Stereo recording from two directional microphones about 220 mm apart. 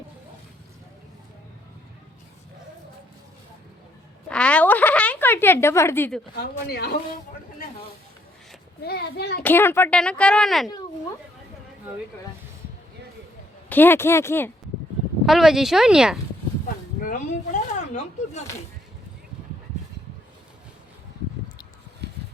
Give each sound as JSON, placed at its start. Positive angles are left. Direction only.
{"t": 4.3, "sound": "a sound", "side_deg": 5}
{"t": 6.7, "sound": "a child's voice", "side_deg": 45}
{"t": 8.8, "sound": "a child's voice", "side_deg": 45}
{"t": 9.4, "sound": "a child's voice", "side_deg": 10}
{"t": 13.7, "sound": "speech", "side_deg": 10}
{"t": 15.3, "sound": "a child's voice", "side_deg": 0}
{"t": 17.1, "sound": "speech", "side_deg": 35}